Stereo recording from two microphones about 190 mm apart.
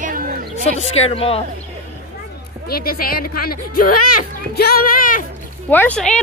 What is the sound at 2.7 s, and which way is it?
A woman's voice, 50° left (ahead or behind).